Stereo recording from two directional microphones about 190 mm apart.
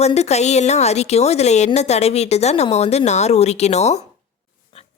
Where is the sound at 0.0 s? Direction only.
35° left (ahead or behind).